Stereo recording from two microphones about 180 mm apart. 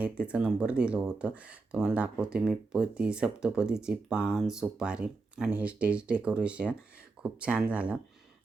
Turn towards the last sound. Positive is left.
turn(degrees=-5)  # may be behind; listen again after turning